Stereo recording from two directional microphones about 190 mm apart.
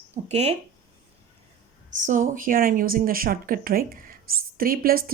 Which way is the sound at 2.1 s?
45° right (ahead or behind).